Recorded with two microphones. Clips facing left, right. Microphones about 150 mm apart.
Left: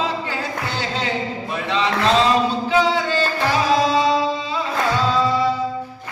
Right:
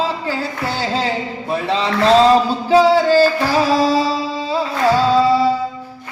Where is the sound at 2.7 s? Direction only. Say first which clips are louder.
Right 10 dB; 35° right (ahead or behind).